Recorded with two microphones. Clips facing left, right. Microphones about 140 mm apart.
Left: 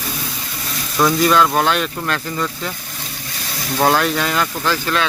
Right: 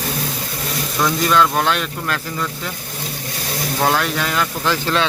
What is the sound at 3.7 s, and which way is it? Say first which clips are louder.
Speech: left 3 dB; centre (ahead or behind).